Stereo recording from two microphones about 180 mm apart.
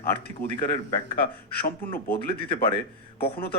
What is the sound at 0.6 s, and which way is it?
A man's voice, 55° left (ahead or behind).